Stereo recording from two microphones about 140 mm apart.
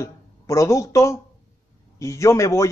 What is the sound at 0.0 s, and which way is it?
A man's voice, 20° left (ahead or behind).